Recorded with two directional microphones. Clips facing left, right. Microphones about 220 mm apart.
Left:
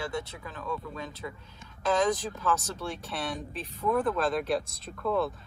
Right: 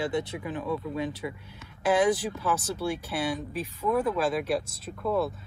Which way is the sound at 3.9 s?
Centre (ahead or behind).